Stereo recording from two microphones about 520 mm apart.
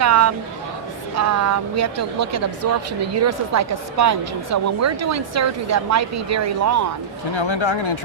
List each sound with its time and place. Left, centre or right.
0.0 s a woman's voice: right
7.3 s speech: left